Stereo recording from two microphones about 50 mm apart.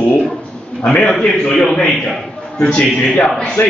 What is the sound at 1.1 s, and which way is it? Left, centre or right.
A man's voice, centre.